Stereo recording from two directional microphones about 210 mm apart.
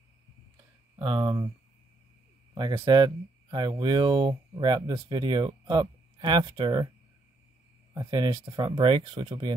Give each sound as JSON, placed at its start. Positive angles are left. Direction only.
{"t": 0.9, "sound": "speech", "side_deg": -25}
{"t": 2.5, "sound": "speech", "side_deg": -20}
{"t": 7.9, "sound": "speech", "side_deg": -20}